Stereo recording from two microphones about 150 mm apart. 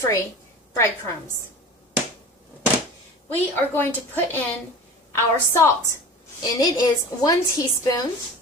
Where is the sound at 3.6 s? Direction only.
15° left (ahead or behind).